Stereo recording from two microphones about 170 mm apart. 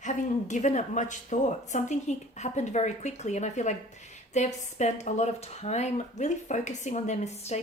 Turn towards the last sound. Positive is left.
turn(degrees=40)  # may be behind; listen again after turning